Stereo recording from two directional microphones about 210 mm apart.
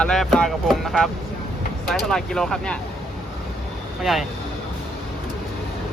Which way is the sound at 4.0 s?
Centre (ahead or behind).